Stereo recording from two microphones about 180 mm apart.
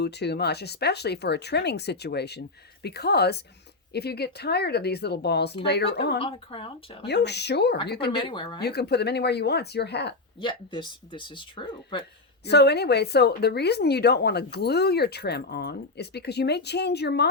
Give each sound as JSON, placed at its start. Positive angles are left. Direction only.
{"t": 0.0, "sound": "speech", "side_deg": 70}
{"t": 6.1, "sound": "speech", "side_deg": 30}
{"t": 7.0, "sound": "speech", "side_deg": 70}
{"t": 8.1, "sound": "speech", "side_deg": 25}
{"t": 8.6, "sound": "speech", "side_deg": 65}
{"t": 10.4, "sound": "speech", "side_deg": 25}
{"t": 12.5, "sound": "speech", "side_deg": 65}